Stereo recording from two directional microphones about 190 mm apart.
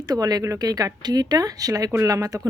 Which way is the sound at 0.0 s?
20° right (ahead or behind).